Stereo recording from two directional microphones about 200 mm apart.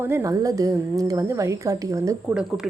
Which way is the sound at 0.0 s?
15° right (ahead or behind).